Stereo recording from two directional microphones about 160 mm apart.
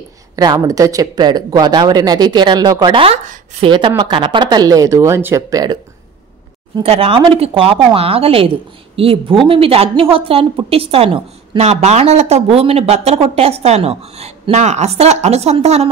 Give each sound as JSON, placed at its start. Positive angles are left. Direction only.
{"t": 0.4, "sound": "speech", "side_deg": -25}
{"t": 6.8, "sound": "speech", "side_deg": -40}